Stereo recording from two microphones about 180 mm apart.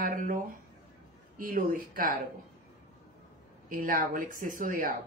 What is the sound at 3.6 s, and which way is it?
Speech, 50° right (ahead or behind).